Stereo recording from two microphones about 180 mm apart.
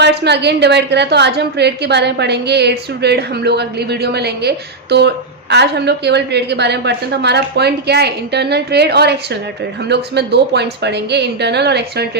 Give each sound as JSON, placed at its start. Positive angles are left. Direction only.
{"t": 0.0, "sound": "a woman's voice", "side_deg": -70}